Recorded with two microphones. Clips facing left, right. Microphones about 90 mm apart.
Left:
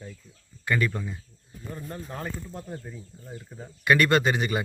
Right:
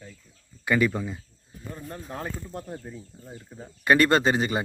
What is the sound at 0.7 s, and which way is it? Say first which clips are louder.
Speech: right 4 dB; 10° right (ahead or behind).